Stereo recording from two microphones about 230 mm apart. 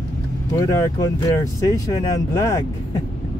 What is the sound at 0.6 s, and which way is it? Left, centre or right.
Speech, centre.